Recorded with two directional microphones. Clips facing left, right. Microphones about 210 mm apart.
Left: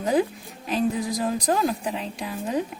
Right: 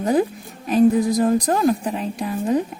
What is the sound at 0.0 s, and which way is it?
A woman's voice, 45° right (ahead or behind).